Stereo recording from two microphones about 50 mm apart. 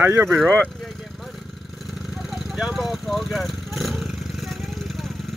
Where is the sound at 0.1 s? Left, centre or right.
Right.